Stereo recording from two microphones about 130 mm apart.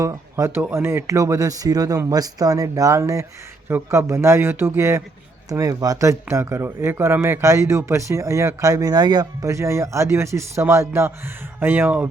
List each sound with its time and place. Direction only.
0.0 s speech: 25° right (ahead or behind)